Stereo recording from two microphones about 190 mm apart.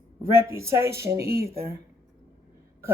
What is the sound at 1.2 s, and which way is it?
Speech, 55° right (ahead or behind).